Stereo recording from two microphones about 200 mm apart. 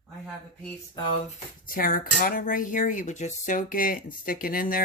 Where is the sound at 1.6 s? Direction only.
45° left (ahead or behind).